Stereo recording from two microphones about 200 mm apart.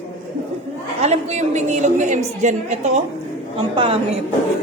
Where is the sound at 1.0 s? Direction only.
35° right (ahead or behind).